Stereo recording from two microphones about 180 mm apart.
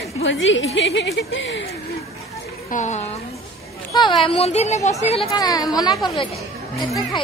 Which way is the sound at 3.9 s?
25° left (ahead or behind).